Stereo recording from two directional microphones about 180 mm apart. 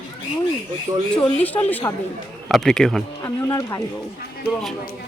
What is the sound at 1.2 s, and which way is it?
Speech, 10° left (ahead or behind).